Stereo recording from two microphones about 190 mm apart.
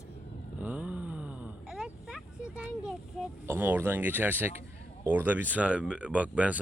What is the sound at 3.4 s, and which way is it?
Speech, 10° right (ahead or behind).